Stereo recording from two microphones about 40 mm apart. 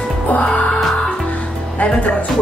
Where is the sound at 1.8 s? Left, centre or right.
Left.